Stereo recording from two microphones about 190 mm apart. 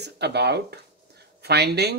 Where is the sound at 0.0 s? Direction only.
60° right (ahead or behind).